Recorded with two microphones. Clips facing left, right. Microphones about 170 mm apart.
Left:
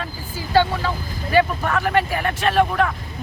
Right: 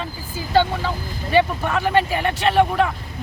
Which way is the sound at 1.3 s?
20° right (ahead or behind).